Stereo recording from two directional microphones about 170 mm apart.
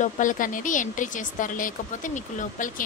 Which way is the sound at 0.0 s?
50° left (ahead or behind).